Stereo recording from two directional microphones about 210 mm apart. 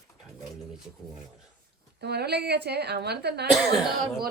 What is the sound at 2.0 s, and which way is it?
Speech, 50° right (ahead or behind).